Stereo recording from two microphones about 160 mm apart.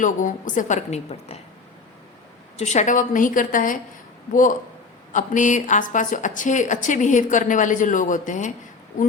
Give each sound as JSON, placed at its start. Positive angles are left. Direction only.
{"t": 0.0, "sound": "a woman's voice", "side_deg": 55}
{"t": 2.6, "sound": "a woman's voice", "side_deg": 45}